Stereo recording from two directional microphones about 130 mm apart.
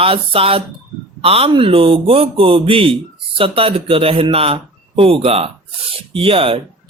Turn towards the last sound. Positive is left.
turn(degrees=-45)  # may be behind; listen again after turning